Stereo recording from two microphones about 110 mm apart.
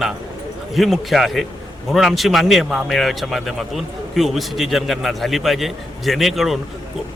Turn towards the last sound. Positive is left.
turn(degrees=0)  # may be behind; listen again after turning